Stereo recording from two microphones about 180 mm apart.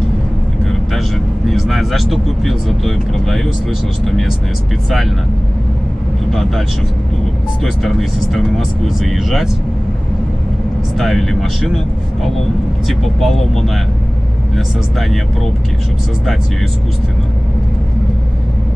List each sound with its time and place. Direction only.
0.7 s vehicle: centre (ahead or behind)
6.3 s speech: centre (ahead or behind)
7.6 s speech: centre (ahead or behind)
11.0 s speech: centre (ahead or behind)
12.8 s speech: centre (ahead or behind)